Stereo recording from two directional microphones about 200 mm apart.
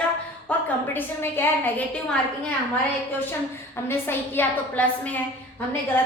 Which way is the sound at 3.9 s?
10° left (ahead or behind).